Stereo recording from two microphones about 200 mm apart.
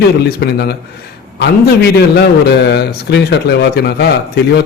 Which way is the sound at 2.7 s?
55° left (ahead or behind).